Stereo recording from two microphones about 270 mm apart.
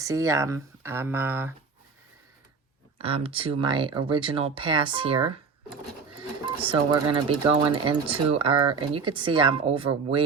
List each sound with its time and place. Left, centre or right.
0.0 s speech: centre
3.0 s speech: right
6.4 s speech: centre